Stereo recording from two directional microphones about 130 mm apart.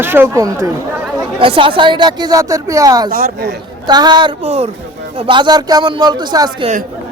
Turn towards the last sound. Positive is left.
turn(degrees=-35)  # may be behind; listen again after turning